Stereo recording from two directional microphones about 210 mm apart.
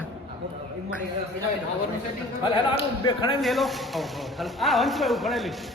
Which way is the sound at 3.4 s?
Centre (ahead or behind).